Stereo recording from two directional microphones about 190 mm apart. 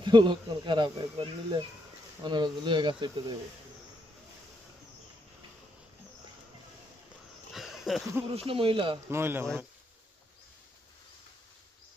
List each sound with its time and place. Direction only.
0.0 s speech: 25° right (ahead or behind)
7.5 s a sound: centre (ahead or behind)
8.3 s speech: 30° right (ahead or behind)
9.0 s speech: 15° right (ahead or behind)